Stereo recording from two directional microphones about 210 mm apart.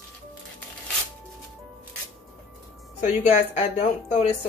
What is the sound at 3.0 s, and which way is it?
A woman's voice, 30° left (ahead or behind).